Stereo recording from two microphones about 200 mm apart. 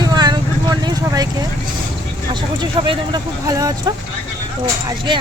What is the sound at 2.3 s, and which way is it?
Speech, 25° right (ahead or behind).